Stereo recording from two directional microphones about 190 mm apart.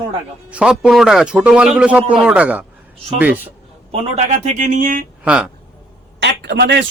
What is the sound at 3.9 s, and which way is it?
Speech, 35° right (ahead or behind).